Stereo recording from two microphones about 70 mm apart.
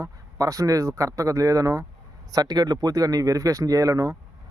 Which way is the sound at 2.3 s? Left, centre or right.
Right.